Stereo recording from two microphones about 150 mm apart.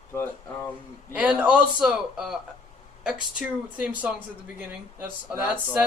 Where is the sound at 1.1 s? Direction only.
5° right (ahead or behind).